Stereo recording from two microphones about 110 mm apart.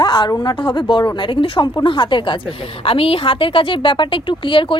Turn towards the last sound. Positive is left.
turn(degrees=50)  # may be behind; listen again after turning